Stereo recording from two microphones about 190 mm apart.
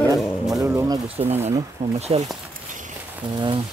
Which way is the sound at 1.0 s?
30° right (ahead or behind).